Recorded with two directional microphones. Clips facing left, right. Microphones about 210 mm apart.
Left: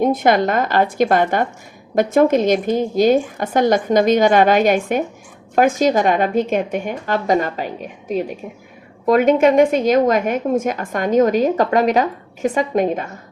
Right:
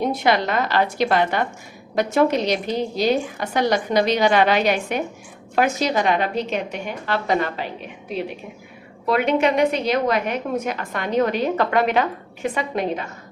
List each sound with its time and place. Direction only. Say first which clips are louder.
0.0 s a woman's voice: left 5 dB; 50° left (ahead or behind)